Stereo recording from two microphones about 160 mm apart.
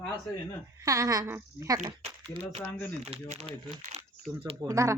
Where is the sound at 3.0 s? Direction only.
40° right (ahead or behind).